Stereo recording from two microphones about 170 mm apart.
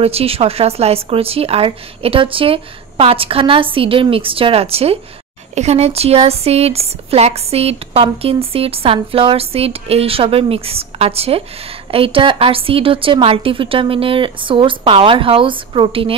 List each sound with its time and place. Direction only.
0.0 s speech: 35° right (ahead or behind)